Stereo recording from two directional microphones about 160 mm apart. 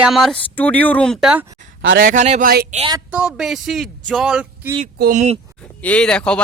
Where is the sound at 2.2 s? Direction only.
45° right (ahead or behind).